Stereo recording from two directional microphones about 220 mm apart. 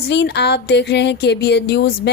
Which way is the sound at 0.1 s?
50° left (ahead or behind).